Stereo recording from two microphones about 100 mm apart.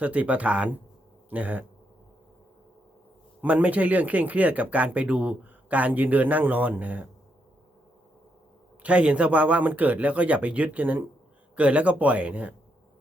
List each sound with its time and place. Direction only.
0.0 s speech: 15° right (ahead or behind)
3.4 s speech: 15° right (ahead or behind)
8.8 s speech: 10° right (ahead or behind)